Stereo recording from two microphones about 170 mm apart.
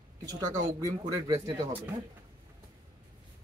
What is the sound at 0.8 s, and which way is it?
Speech, 20° right (ahead or behind).